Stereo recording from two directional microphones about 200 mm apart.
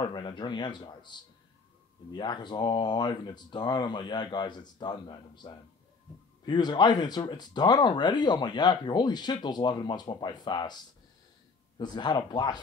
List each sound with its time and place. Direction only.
0.0 s speech: 20° left (ahead or behind)
11.8 s speech: 20° left (ahead or behind)